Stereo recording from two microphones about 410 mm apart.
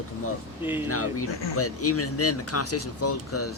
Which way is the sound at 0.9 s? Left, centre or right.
Left.